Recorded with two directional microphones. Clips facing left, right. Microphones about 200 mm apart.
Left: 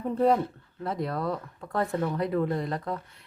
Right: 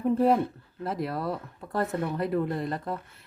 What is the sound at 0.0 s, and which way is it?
Speech, 5° right (ahead or behind).